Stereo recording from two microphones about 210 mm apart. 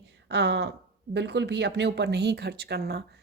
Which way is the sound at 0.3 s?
55° right (ahead or behind).